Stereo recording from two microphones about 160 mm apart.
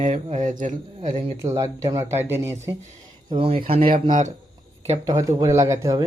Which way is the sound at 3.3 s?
35° right (ahead or behind).